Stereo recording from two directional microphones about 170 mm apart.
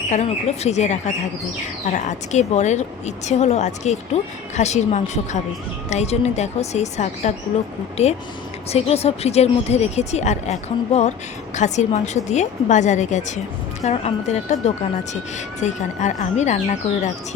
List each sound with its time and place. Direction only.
0.1 s speech: 40° left (ahead or behind)